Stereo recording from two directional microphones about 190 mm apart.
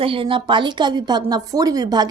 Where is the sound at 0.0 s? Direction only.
30° right (ahead or behind).